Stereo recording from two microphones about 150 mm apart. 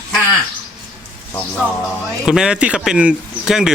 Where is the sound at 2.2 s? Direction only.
5° right (ahead or behind).